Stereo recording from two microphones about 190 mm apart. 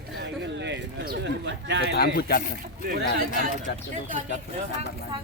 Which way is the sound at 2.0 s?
55° left (ahead or behind).